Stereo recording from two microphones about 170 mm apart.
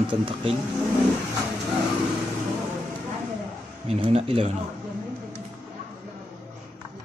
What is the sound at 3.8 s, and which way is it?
Speech, 35° right (ahead or behind).